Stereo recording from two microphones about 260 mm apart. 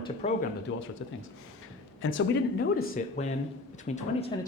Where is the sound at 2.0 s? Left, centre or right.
Left.